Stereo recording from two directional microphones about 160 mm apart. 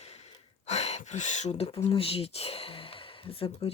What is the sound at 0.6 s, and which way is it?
Speech, 40° left (ahead or behind).